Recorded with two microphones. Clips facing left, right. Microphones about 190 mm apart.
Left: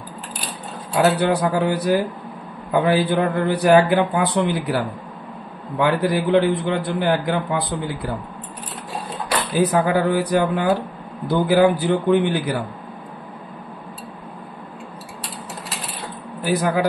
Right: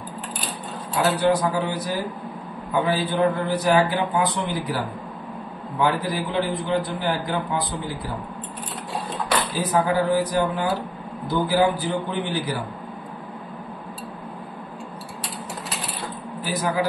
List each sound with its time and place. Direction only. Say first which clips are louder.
1.1 s a man's voice: left 1 dB; 60° left (ahead or behind)
9.4 s a man's voice: left 7 dB; 65° left (ahead or behind)
16.4 s a man's voice: left 5 dB; 60° left (ahead or behind)